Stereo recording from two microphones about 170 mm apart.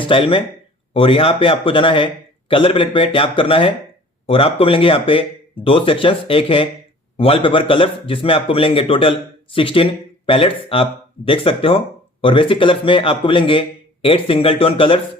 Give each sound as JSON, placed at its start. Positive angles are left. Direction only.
{"t": 0.0, "sound": "a man's voice", "side_deg": 30}